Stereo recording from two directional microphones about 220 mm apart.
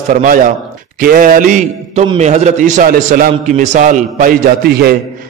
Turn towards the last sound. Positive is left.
turn(degrees=-45)  # may be behind; listen again after turning